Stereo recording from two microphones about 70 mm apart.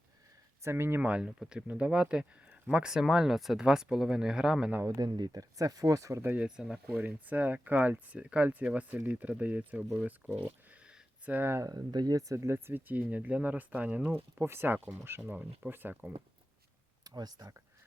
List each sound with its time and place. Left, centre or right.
0.6 s speech: right
1.0 s speech: centre
4.9 s speech: right
6.4 s speech: centre
6.9 s speech: right
10.7 s a sound: centre
11.3 s speech: right
11.6 s speech: right
12.1 s speech: right
14.1 s speech: right
17.0 s speech: right